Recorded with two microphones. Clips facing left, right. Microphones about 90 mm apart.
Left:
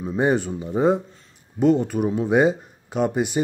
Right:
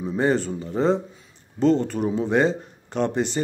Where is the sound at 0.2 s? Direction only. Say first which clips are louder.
Left 1 dB; 10° left (ahead or behind).